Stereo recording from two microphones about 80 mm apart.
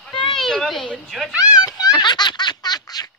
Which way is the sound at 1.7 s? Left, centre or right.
Left.